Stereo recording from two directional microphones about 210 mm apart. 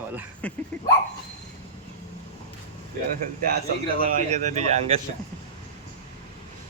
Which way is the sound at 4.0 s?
35° right (ahead or behind).